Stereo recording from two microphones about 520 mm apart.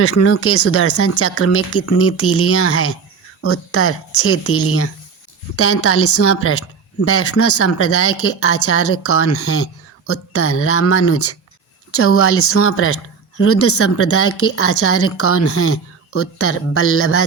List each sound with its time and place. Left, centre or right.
0.0 s a woman's voice: left